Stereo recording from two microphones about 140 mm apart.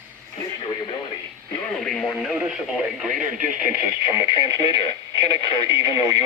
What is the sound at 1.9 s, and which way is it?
Speech, centre (ahead or behind).